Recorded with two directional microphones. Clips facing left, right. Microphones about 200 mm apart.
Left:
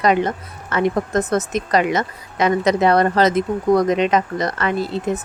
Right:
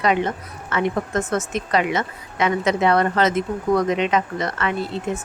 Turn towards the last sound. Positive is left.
turn(degrees=35)  # may be behind; listen again after turning